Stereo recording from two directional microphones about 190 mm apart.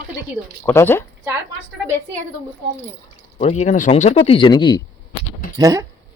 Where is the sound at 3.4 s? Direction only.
35° left (ahead or behind).